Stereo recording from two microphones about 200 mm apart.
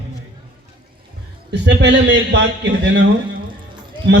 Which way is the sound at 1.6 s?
60° right (ahead or behind).